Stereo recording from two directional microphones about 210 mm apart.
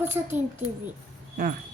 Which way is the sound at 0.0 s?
10° right (ahead or behind).